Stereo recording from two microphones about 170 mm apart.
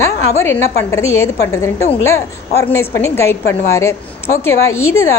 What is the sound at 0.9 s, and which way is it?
A woman's voice, 15° left (ahead or behind).